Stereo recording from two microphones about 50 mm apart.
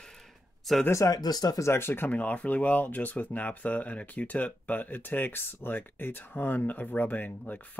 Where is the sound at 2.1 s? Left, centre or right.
Left.